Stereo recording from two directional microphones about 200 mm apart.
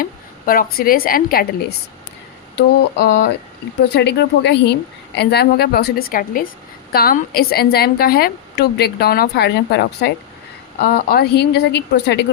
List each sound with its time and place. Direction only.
0.0 s a woman's voice: 45° left (ahead or behind)
2.6 s a woman's voice: 55° left (ahead or behind)